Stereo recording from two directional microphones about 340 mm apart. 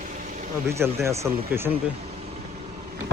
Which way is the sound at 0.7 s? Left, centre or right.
Centre.